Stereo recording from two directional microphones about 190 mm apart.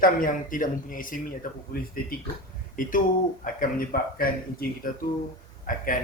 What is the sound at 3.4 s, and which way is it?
Speech, 50° left (ahead or behind).